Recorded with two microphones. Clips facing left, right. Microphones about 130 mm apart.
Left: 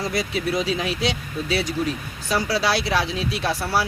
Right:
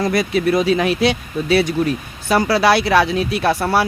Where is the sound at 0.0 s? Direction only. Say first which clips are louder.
Right 8 dB; 60° right (ahead or behind).